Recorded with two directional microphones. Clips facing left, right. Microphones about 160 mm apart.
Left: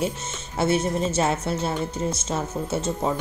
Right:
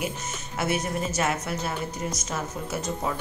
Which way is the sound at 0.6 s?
30° left (ahead or behind).